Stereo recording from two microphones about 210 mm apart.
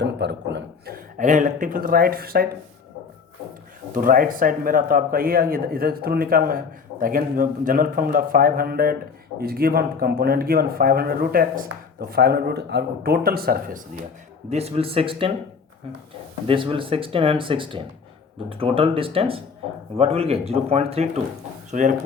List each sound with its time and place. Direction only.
0.0 s a sound: 55° right (ahead or behind)
1.2 s a man's voice: 35° right (ahead or behind)
3.9 s a man's voice: 40° right (ahead or behind)
14.5 s speech: 30° right (ahead or behind)
16.5 s speech: 25° right (ahead or behind)